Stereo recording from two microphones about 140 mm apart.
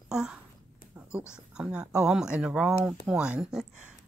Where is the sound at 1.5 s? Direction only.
5° right (ahead or behind).